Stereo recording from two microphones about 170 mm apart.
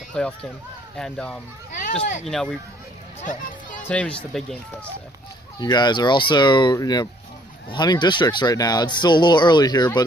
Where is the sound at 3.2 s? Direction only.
50° left (ahead or behind).